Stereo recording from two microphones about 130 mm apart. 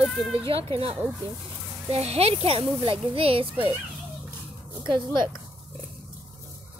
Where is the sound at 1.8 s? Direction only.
55° right (ahead or behind).